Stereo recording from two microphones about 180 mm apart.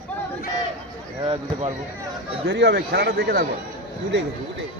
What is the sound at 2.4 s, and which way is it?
A man's voice, 70° right (ahead or behind).